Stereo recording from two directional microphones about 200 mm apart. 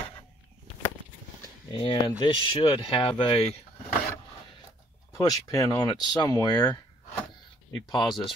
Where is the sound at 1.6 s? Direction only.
25° left (ahead or behind).